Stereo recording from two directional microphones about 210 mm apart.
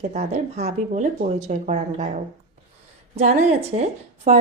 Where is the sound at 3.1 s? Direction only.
30° right (ahead or behind).